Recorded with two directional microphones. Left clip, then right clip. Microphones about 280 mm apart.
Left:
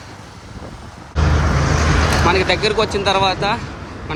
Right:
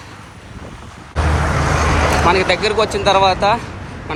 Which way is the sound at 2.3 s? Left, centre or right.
Centre.